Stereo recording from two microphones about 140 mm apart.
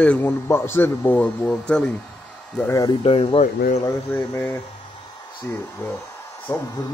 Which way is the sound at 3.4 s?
70° left (ahead or behind).